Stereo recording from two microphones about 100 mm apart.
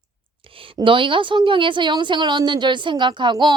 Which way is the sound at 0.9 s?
55° right (ahead or behind).